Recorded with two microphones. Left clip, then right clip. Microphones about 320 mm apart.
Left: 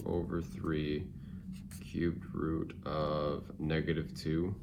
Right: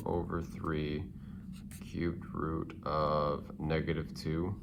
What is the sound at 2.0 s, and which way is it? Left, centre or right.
Speech, centre.